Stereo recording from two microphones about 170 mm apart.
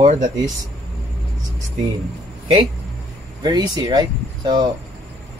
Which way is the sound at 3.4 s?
25° right (ahead or behind).